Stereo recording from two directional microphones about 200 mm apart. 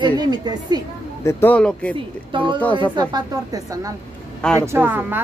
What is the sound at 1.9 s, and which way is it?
A woman's voice, 25° right (ahead or behind).